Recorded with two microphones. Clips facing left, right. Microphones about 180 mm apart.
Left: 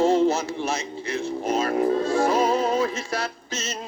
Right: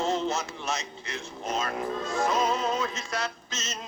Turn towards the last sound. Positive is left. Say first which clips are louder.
# left 6 dB
turn(degrees=30)  # may be behind; listen again after turning